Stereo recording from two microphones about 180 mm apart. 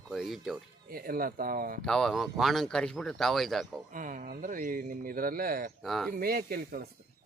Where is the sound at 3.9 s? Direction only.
50° right (ahead or behind).